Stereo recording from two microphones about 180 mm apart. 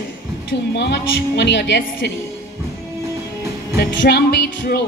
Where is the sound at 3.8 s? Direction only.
65° left (ahead or behind).